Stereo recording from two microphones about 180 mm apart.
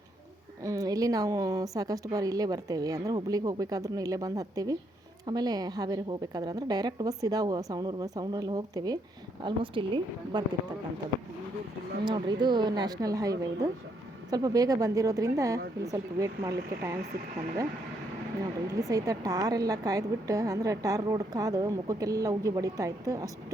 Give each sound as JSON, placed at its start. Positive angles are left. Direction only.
{"t": 0.6, "sound": "a woman's voice", "side_deg": -20}
{"t": 12.0, "sound": "a woman's voice", "side_deg": -25}
{"t": 18.7, "sound": "a woman's voice", "side_deg": -20}